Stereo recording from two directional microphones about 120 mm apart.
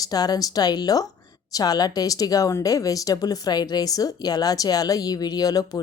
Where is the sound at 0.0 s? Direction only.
35° left (ahead or behind).